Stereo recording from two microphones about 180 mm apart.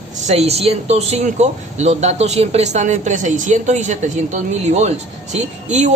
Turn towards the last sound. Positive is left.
turn(degrees=-40)  # may be behind; listen again after turning